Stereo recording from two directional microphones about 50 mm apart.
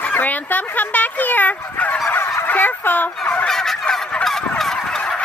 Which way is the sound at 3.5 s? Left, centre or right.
Centre.